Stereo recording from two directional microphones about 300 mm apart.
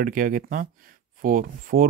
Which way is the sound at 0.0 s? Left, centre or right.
Right.